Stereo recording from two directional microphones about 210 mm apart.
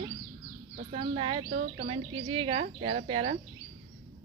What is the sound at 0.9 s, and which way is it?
Speech, 25° right (ahead or behind).